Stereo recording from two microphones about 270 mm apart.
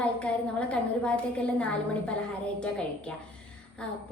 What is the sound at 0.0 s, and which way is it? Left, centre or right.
A woman's voice, centre.